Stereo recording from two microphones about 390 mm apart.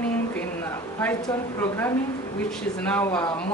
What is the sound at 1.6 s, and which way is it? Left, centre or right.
Speech, centre.